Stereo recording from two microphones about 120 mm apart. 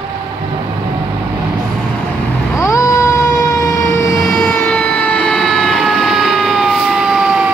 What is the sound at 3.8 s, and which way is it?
Fire engine, 20° left (ahead or behind).